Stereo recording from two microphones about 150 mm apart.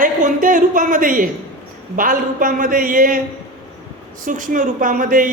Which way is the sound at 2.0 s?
65° right (ahead or behind).